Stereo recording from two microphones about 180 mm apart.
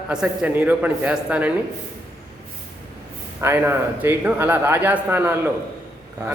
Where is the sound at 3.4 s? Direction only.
10° right (ahead or behind).